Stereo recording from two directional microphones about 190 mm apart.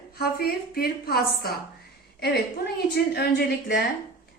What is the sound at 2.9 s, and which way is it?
Speech, 55° left (ahead or behind).